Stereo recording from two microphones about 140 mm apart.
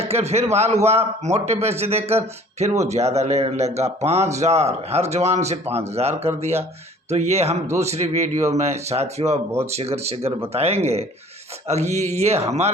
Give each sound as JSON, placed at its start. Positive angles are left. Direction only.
{"t": 0.0, "sound": "a man's voice", "side_deg": -50}